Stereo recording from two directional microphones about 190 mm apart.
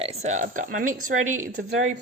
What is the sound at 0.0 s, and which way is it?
A woman's voice, 35° right (ahead or behind).